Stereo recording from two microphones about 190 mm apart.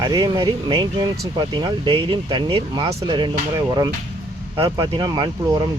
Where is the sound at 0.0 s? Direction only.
20° right (ahead or behind).